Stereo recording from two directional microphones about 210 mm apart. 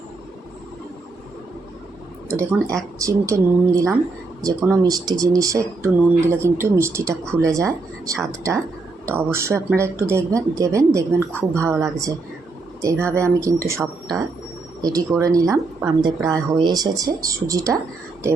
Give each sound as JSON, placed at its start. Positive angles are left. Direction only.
{"t": 2.7, "sound": "speech", "side_deg": -15}